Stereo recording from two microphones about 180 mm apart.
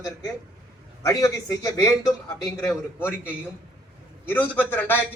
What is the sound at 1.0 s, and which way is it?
A man's voice, 20° left (ahead or behind).